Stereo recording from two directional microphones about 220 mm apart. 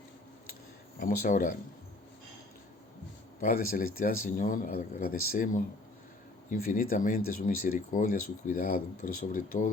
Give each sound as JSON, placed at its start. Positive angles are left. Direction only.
{"t": 0.9, "sound": "speech", "side_deg": 40}
{"t": 3.4, "sound": "speech", "side_deg": 40}